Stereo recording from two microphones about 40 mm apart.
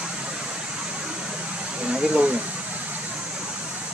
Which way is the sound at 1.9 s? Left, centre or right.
Right.